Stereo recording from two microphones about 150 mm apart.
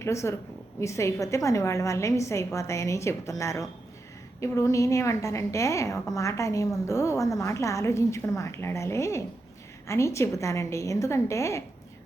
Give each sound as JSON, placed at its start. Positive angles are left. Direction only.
{"t": 0.0, "sound": "a woman's voice", "side_deg": 20}